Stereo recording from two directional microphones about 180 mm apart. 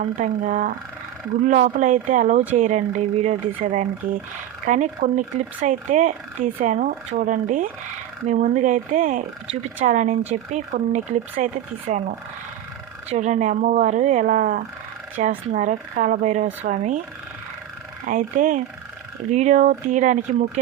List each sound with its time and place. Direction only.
0.0 s speech: 45° right (ahead or behind)
13.1 s speech: 40° right (ahead or behind)
18.0 s speech: 45° right (ahead or behind)